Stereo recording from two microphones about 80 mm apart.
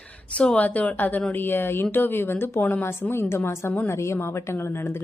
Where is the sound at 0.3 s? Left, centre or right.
Centre.